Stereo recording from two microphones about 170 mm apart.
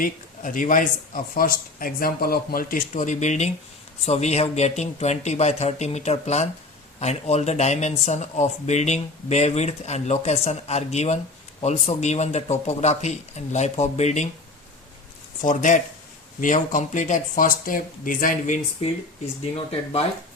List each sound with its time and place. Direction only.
0.0 s speech: 50° left (ahead or behind)
15.4 s speech: 45° left (ahead or behind)
19.5 s speech: 35° left (ahead or behind)